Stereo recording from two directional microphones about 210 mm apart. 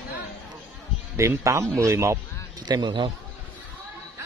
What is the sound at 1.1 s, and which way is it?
A man's voice, 15° right (ahead or behind).